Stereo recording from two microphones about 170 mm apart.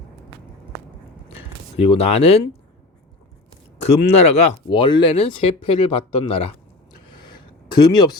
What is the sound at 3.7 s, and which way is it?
Speech, 35° left (ahead or behind).